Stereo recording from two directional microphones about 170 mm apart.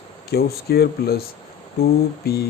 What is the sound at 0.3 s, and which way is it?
Speech, 65° left (ahead or behind).